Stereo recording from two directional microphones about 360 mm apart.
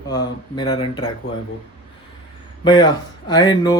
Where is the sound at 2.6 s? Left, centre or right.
Centre.